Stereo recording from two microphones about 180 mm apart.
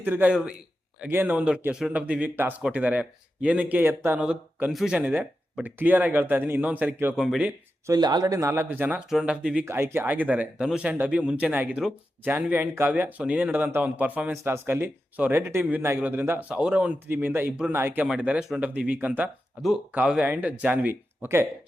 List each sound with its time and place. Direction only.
0.0 s speech: 10° right (ahead or behind)
7.9 s speech: 20° right (ahead or behind)